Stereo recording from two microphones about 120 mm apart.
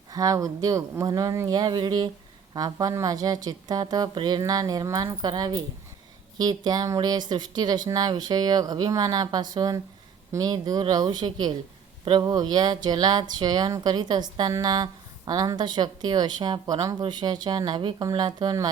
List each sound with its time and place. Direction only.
0.1 s a woman's voice: 30° right (ahead or behind)